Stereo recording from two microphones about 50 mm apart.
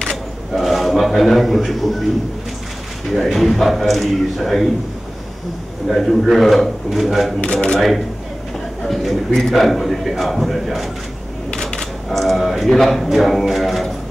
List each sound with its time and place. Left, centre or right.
0.0 s a sound: centre
3.3 s a man's voice: centre
5.9 s a man's voice: centre
7.3 s speech: left
8.8 s a man's voice: centre
11.5 s a sound: centre
12.1 s a man's voice: centre